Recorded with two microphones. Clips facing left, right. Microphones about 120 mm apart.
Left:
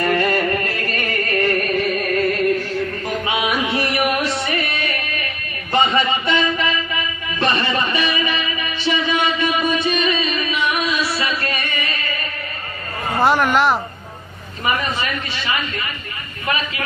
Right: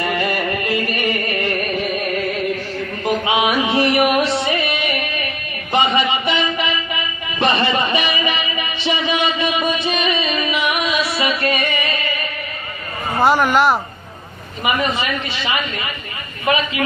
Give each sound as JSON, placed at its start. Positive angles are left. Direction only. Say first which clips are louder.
{"t": 0.0, "sound": "music", "louder": "left 2 dB", "side_deg": -10}
{"t": 3.2, "sound": "music", "louder": "right 2 dB", "side_deg": -25}
{"t": 5.7, "sound": "a sound", "louder": "even", "side_deg": -25}
{"t": 6.6, "sound": "music", "louder": "even", "side_deg": -25}
{"t": 13.1, "sound": "speech", "louder": "right 1 dB", "side_deg": 0}
{"t": 14.6, "sound": "a man's voice", "louder": "right 2 dB", "side_deg": -20}